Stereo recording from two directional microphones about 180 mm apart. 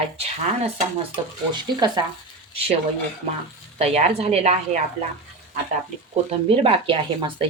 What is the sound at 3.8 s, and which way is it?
Speech, 35° right (ahead or behind).